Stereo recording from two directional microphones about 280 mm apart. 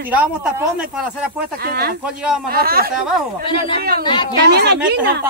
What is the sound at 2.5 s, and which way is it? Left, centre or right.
Speech, right.